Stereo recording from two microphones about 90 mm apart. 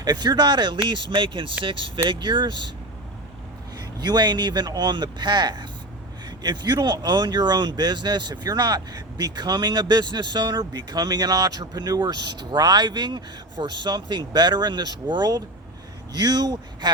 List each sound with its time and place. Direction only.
0.0 s speech: 50° right (ahead or behind)
3.8 s speech: 50° right (ahead or behind)